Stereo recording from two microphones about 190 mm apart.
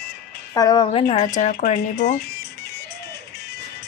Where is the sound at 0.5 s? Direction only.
20° left (ahead or behind); by 2.5 s 55° left (ahead or behind).